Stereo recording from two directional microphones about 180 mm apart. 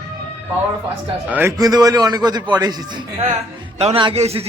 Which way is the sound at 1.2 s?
10° right (ahead or behind).